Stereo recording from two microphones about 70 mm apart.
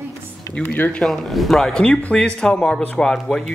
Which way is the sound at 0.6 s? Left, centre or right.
Left.